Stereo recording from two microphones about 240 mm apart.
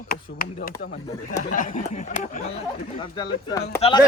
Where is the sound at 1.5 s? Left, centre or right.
Left.